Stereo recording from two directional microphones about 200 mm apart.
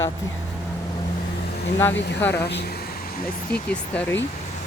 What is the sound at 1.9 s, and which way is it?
Speech, 60° left (ahead or behind).